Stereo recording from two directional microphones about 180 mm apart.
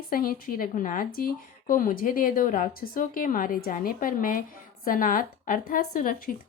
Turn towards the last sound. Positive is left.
turn(degrees=50)  # may be behind; listen again after turning